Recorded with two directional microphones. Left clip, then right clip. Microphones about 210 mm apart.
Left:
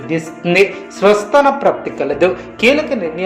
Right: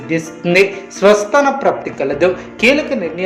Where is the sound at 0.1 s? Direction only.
Centre (ahead or behind).